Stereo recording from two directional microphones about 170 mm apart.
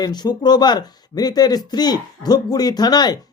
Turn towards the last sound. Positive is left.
turn(degrees=25)  # may be behind; listen again after turning